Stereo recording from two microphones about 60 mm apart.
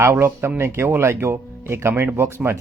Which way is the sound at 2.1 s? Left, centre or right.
Right.